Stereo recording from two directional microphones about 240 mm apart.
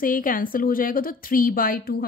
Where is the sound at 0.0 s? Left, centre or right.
Left.